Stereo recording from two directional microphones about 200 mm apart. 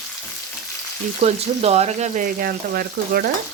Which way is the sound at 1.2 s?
30° right (ahead or behind).